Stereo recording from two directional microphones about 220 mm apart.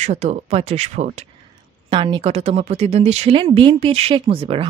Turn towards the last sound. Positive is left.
turn(degrees=-25)  # may be behind; listen again after turning